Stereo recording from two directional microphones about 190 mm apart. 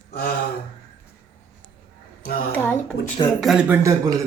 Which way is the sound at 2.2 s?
50° left (ahead or behind).